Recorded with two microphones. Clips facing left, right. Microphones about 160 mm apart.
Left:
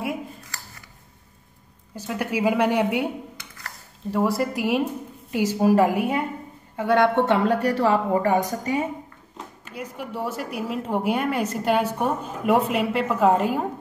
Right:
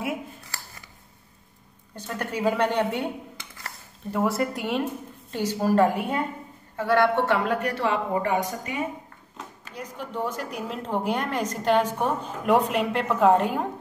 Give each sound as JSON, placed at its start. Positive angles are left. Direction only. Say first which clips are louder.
{"t": 2.0, "sound": "a woman's voice", "louder": "left 4 dB", "side_deg": 10}
{"t": 4.1, "sound": "a woman's voice", "louder": "left 2 dB", "side_deg": 0}
{"t": 6.8, "sound": "a woman's voice", "louder": "left 2 dB", "side_deg": 20}
{"t": 7.4, "sound": "speech", "louder": "left 5 dB", "side_deg": 35}
{"t": 9.8, "sound": "a woman's voice", "louder": "left 1 dB", "side_deg": 10}